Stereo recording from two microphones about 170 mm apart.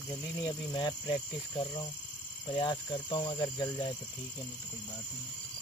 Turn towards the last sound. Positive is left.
turn(degrees=25)  # may be behind; listen again after turning